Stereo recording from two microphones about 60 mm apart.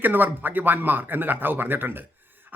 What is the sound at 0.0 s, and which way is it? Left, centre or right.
Speech, right.